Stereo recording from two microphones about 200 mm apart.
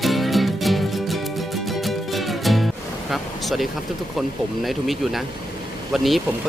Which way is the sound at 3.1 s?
Centre (ahead or behind).